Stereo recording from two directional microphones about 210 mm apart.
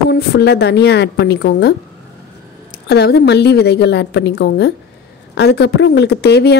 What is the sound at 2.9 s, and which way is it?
Speech, 50° left (ahead or behind).